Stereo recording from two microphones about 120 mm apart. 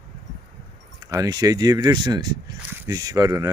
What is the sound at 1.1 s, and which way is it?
Speech, 30° right (ahead or behind).